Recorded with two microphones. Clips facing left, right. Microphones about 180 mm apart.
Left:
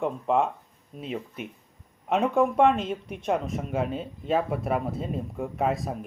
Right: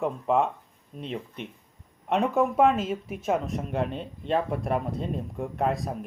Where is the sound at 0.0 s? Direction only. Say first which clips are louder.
Even; centre (ahead or behind).